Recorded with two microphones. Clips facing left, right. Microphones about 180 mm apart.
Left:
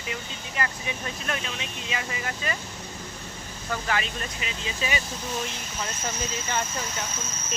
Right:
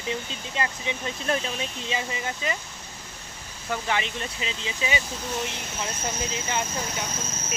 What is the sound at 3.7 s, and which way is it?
Speech, 20° right (ahead or behind).